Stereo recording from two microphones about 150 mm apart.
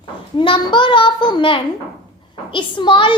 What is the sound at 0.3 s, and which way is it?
A child's voice, 30° left (ahead or behind).